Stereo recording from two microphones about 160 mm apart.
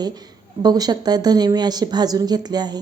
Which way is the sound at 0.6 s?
25° right (ahead or behind).